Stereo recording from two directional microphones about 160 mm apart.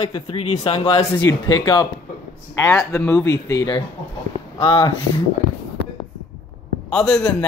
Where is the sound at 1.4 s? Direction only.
25° left (ahead or behind).